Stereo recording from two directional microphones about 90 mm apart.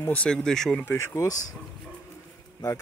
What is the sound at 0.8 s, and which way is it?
Speech, 25° left (ahead or behind).